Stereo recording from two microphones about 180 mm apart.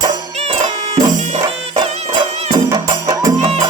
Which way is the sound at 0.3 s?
35° right (ahead or behind).